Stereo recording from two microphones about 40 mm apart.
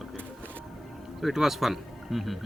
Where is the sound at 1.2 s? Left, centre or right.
Centre.